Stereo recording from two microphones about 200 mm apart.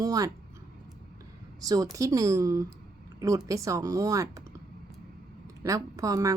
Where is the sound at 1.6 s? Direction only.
15° right (ahead or behind).